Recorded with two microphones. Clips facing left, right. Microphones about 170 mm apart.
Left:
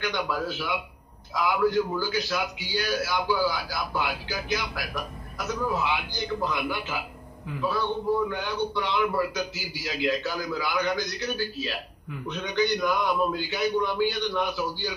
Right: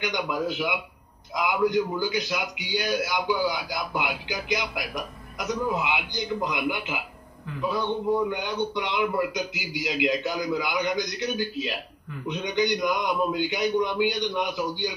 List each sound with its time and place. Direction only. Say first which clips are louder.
0.0 s a man's voice: right 1 dB; 20° right (ahead or behind)
8.3 s a man's voice: right 1 dB; 20° right (ahead or behind)